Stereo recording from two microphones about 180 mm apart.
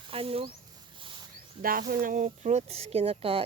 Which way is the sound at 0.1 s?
30° right (ahead or behind).